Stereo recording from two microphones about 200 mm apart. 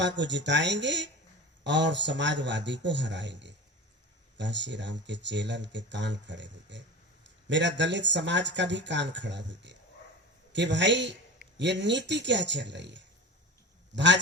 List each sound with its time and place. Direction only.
0.0 s a man's voice: 60° right (ahead or behind)